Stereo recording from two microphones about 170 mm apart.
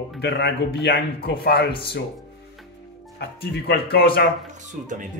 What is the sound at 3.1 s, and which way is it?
Speech, 70° left (ahead or behind).